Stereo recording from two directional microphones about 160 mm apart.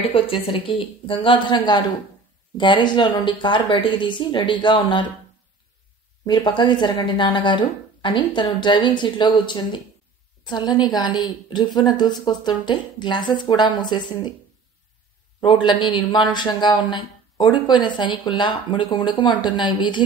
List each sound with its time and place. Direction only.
0.1 s a woman's voice: 35° left (ahead or behind)
6.2 s speech: 30° left (ahead or behind)
15.4 s speech: 30° left (ahead or behind)